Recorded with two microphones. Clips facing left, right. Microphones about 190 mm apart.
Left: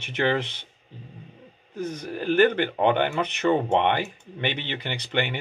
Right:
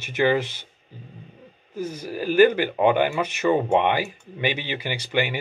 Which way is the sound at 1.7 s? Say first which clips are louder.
Right 1 dB; 5° right (ahead or behind).